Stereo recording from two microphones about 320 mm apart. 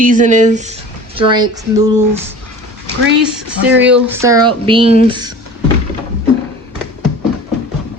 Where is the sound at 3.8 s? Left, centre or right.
Centre.